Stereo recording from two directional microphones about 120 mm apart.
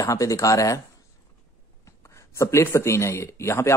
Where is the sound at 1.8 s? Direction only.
25° left (ahead or behind).